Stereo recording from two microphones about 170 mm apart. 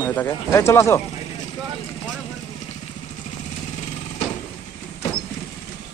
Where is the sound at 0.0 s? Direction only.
10° left (ahead or behind).